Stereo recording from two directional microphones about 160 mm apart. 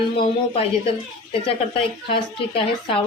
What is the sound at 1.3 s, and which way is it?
A woman's voice, 35° left (ahead or behind).